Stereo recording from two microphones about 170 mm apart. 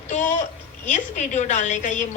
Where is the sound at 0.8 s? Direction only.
45° left (ahead or behind).